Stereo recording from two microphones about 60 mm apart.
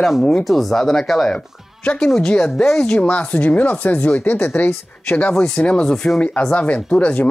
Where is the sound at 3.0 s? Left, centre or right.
Left.